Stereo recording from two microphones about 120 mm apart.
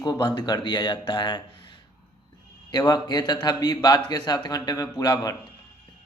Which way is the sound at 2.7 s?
35° left (ahead or behind).